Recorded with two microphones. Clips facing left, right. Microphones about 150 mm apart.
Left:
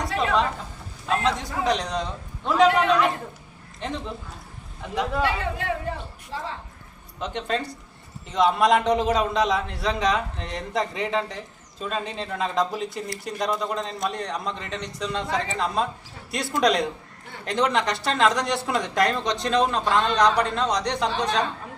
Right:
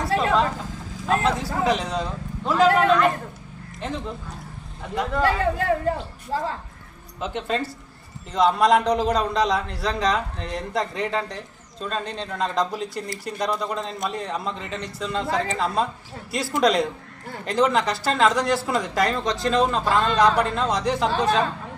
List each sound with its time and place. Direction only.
1.1 s a man's voice: 5° right (ahead or behind)
3.8 s a man's voice: centre (ahead or behind)
5.2 s a woman's voice: 40° right (ahead or behind)
7.2 s a man's voice: 5° right (ahead or behind)